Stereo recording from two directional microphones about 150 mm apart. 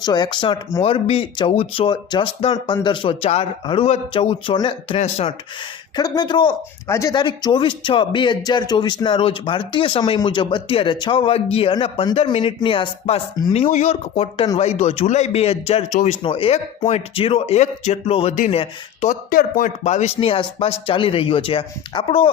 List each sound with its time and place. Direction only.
0.0 s speech: 30° left (ahead or behind); by 5.3 s 45° left (ahead or behind)
6.0 s speech: 30° left (ahead or behind)
6.8 s speech: 20° left (ahead or behind); by 15.8 s 40° left (ahead or behind)
15.9 s speech: 55° left (ahead or behind)
16.2 s speech: 35° left (ahead or behind)
19.3 s speech: 70° left (ahead or behind)
19.8 s speech: 45° left (ahead or behind)